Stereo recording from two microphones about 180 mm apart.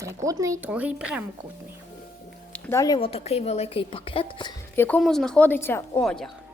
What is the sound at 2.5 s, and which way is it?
A woman's voice, 10° left (ahead or behind).